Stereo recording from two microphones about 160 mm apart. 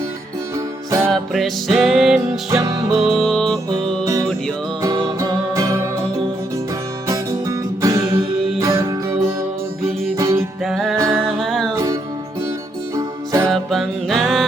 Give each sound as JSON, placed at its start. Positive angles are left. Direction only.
{"t": 0.5, "sound": "music", "side_deg": -20}
{"t": 1.1, "sound": "music", "side_deg": 0}
{"t": 2.5, "sound": "music", "side_deg": -20}
{"t": 3.0, "sound": "music", "side_deg": 0}
{"t": 4.0, "sound": "music", "side_deg": -20}
{"t": 7.1, "sound": "music", "side_deg": -20}
{"t": 10.6, "sound": "music", "side_deg": 0}
{"t": 10.9, "sound": "music", "side_deg": -20}
{"t": 11.3, "sound": "music", "side_deg": 0}
{"t": 11.7, "sound": "music", "side_deg": -20}
{"t": 13.0, "sound": "music", "side_deg": -20}
{"t": 13.5, "sound": "music", "side_deg": 0}